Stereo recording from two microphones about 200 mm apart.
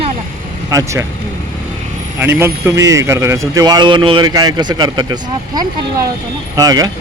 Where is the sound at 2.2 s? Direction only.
10° right (ahead or behind).